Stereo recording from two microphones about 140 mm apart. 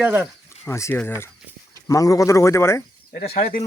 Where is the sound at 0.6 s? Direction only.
20° left (ahead or behind).